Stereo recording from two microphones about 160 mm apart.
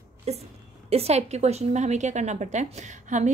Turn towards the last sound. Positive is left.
turn(degrees=-50)  # may be behind; listen again after turning